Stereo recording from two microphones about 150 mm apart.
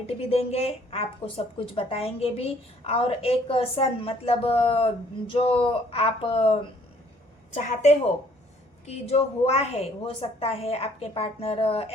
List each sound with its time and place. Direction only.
0.2 s a woman's voice: 40° left (ahead or behind)
7.5 s a woman's voice: 50° left (ahead or behind)